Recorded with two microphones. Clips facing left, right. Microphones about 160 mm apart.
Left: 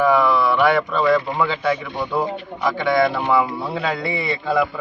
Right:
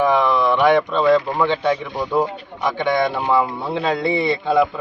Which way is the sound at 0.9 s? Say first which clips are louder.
Right 2 dB; 20° right (ahead or behind).